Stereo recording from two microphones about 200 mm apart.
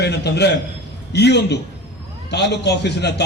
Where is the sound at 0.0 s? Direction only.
55° left (ahead or behind).